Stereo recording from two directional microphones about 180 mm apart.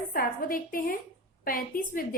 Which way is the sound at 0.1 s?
55° left (ahead or behind).